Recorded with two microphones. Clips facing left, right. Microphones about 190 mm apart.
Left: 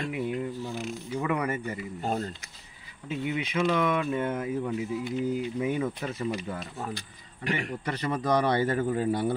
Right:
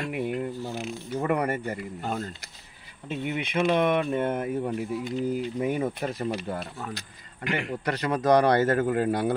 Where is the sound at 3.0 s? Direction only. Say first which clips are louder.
Even; 60° right (ahead or behind).